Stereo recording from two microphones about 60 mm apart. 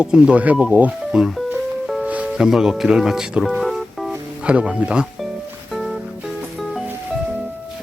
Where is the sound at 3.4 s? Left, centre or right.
Centre.